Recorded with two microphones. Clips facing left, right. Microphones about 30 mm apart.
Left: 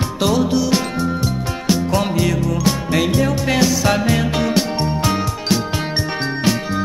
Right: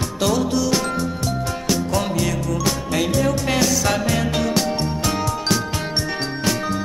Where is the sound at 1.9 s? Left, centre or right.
Left.